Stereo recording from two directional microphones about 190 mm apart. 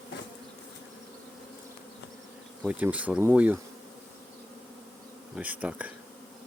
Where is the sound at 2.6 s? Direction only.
10° right (ahead or behind).